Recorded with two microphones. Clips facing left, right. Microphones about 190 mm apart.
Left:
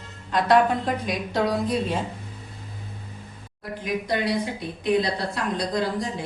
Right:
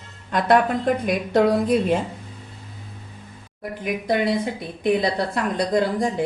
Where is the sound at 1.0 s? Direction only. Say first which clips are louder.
Right 7 dB; 55° right (ahead or behind).